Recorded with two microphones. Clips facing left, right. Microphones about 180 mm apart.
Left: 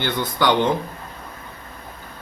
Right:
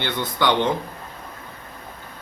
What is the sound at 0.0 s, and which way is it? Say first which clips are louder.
Speech: left 2 dB; 10° left (ahead or behind).